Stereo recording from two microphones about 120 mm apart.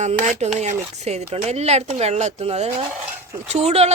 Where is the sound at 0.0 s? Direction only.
75° right (ahead or behind).